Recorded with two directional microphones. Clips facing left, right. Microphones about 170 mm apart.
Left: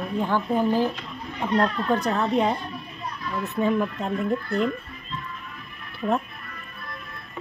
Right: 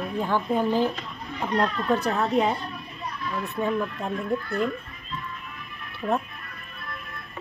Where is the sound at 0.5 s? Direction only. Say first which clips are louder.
Left 1 dB; 10° left (ahead or behind).